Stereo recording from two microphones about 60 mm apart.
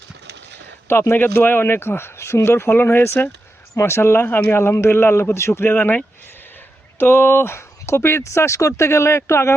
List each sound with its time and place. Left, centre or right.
1.1 s speech: left
4.3 s speech: left
4.5 s speech: left
7.0 s speech: left